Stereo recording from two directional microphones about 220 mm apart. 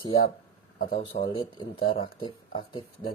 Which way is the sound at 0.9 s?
25° left (ahead or behind).